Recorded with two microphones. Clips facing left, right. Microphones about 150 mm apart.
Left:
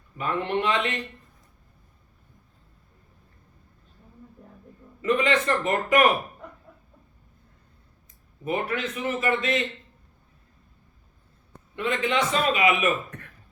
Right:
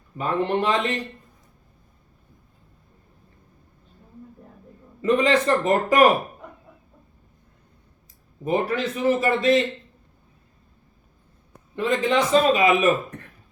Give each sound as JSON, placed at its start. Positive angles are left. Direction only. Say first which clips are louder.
{"t": 0.2, "sound": "a man's voice", "louder": "right 3 dB", "side_deg": -35}
{"t": 5.0, "sound": "a man's voice", "louder": "right 4 dB", "side_deg": -35}
{"t": 8.4, "sound": "a man's voice", "louder": "right 5 dB", "side_deg": -35}
{"t": 11.8, "sound": "a man's voice", "louder": "right 4 dB", "side_deg": -35}